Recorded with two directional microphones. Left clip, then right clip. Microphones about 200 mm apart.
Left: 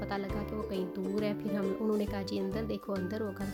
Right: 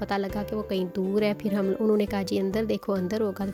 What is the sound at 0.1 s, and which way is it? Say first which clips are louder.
Speech: right 10 dB; 40° right (ahead or behind).